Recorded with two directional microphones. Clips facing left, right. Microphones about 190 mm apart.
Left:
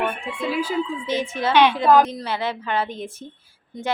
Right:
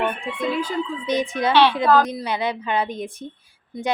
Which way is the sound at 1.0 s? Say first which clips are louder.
Right 2 dB; 15° right (ahead or behind).